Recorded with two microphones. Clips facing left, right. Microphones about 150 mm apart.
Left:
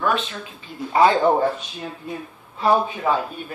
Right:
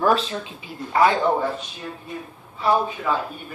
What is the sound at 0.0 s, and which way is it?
Speech, 35° right (ahead or behind).